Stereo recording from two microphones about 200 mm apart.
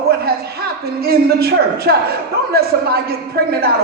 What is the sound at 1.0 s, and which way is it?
A man's voice, 50° right (ahead or behind).